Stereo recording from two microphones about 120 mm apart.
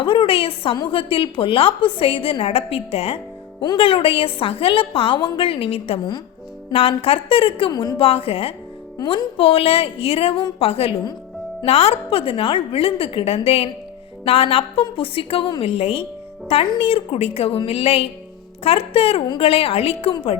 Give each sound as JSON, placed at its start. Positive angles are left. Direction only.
{"t": 0.0, "sound": "a woman's voice", "side_deg": 50}
{"t": 7.7, "sound": "a woman's voice", "side_deg": 35}
{"t": 7.9, "sound": "a woman's voice", "side_deg": 55}
{"t": 15.6, "sound": "speech", "side_deg": 55}